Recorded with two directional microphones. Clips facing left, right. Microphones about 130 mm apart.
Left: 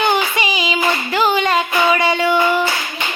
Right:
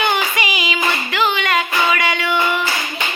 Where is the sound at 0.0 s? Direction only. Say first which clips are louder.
Left 2 dB; 30° left (ahead or behind).